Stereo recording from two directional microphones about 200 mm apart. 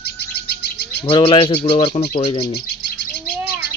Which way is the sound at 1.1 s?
25° left (ahead or behind).